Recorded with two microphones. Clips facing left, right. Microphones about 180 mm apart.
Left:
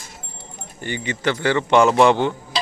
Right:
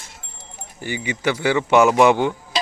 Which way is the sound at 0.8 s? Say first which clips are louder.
Even; 10° right (ahead or behind).